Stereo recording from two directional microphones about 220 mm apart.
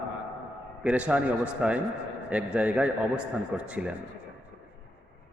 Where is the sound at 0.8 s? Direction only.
5° right (ahead or behind).